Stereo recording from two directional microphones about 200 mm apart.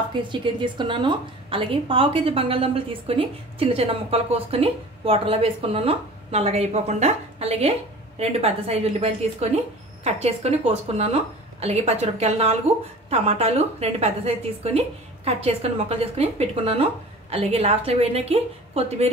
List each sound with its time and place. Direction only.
0.1 s a woman's voice: 25° right (ahead or behind)